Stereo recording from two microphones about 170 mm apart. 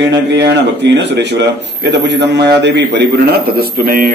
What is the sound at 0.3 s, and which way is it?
A man's voice, 90° right.